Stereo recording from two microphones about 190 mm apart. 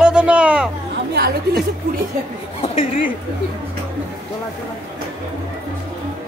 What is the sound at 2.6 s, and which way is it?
Speech, 30° left (ahead or behind).